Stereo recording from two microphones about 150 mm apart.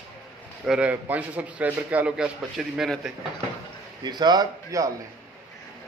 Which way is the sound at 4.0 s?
30° right (ahead or behind).